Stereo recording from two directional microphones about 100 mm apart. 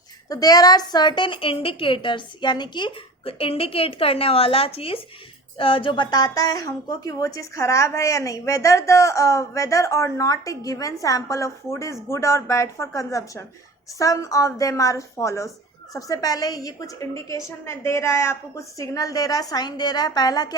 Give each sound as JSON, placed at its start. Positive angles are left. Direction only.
{"t": 0.3, "sound": "a woman's voice", "side_deg": 40}